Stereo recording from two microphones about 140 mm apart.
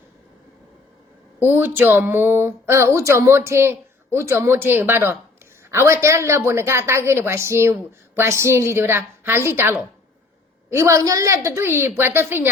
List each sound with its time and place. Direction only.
1.5 s a woman's voice: 15° right (ahead or behind)